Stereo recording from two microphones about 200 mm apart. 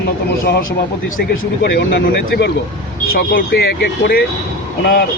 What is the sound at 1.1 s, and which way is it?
Speech, 50° left (ahead or behind).